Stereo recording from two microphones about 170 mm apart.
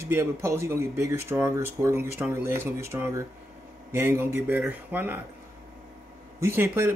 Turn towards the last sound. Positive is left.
turn(degrees=-15)  # may be behind; listen again after turning